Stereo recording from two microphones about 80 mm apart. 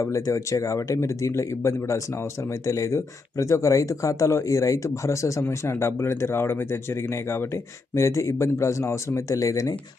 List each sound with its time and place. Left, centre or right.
0.0 s speech: left